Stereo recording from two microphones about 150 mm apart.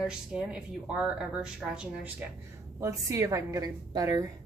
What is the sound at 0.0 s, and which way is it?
Speech, 5° right (ahead or behind).